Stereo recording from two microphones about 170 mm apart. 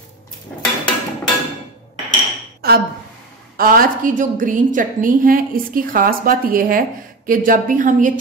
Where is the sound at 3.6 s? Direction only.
55° right (ahead or behind).